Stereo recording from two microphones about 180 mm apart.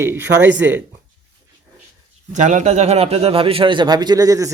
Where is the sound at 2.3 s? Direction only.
40° right (ahead or behind).